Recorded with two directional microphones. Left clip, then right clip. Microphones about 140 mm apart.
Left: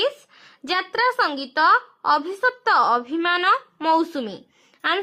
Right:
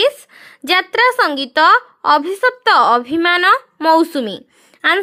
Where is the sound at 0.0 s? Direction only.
55° right (ahead or behind).